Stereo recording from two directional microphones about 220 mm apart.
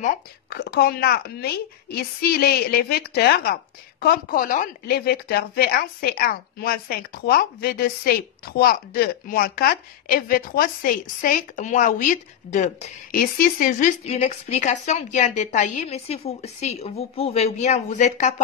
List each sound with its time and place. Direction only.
0.0 s a woman's voice: 45° left (ahead or behind)